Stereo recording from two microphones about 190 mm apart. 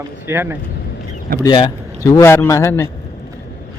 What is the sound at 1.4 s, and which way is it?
A man's voice, 20° left (ahead or behind).